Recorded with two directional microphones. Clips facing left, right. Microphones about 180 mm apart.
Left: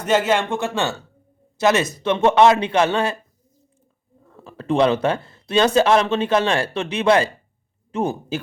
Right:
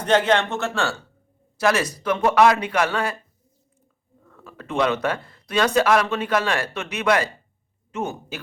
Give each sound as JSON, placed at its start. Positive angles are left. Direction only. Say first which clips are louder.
{"t": 0.0, "sound": "speech", "louder": "even", "side_deg": 5}
{"t": 4.3, "sound": "speech", "louder": "left 10 dB", "side_deg": 30}